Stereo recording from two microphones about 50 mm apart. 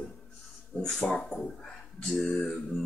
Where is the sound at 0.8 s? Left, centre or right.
Centre.